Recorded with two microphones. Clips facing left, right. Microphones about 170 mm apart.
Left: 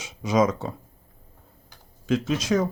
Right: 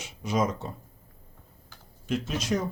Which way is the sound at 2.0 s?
90° left.